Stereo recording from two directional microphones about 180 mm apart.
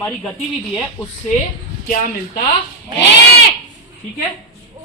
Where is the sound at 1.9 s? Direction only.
45° left (ahead or behind).